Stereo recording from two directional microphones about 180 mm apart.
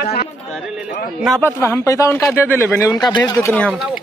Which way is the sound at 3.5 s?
Centre (ahead or behind).